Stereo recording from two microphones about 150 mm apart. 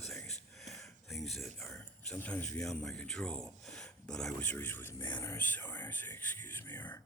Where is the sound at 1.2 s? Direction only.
Centre (ahead or behind).